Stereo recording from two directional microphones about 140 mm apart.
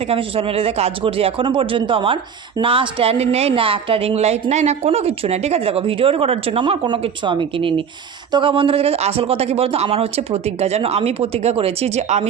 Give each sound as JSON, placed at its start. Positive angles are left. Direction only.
{"t": 0.1, "sound": "a woman's voice", "side_deg": -40}